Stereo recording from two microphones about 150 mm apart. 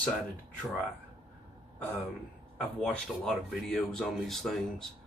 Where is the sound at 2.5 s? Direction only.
5° left (ahead or behind).